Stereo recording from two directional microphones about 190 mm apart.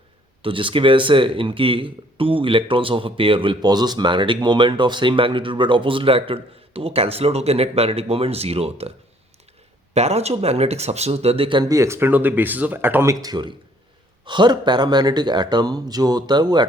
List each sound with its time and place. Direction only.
0.4 s speech: 25° right (ahead or behind)
9.9 s speech: 35° right (ahead or behind)